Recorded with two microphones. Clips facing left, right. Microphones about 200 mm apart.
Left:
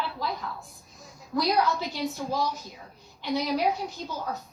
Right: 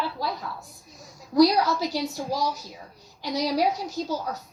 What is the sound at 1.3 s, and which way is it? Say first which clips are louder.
A woman's voice: right 6 dB; 40° right (ahead or behind).